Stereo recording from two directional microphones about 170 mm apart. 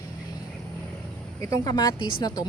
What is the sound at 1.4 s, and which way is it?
A woman's voice, 20° left (ahead or behind).